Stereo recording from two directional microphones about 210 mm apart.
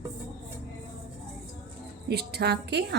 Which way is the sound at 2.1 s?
50° right (ahead or behind).